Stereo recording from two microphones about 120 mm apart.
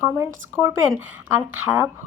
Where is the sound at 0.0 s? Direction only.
25° right (ahead or behind).